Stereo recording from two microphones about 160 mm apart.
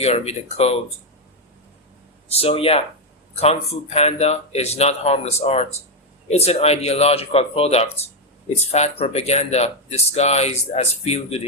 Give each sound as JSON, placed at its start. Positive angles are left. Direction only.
{"t": 0.0, "sound": "speech", "side_deg": 40}
{"t": 2.3, "sound": "speech", "side_deg": 35}